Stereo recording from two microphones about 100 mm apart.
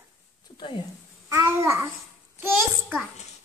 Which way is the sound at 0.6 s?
55° left (ahead or behind).